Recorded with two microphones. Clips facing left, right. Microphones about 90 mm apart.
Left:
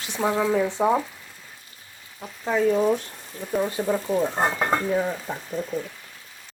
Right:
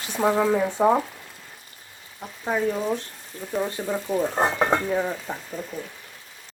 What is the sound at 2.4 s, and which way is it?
Speech, 15° right (ahead or behind).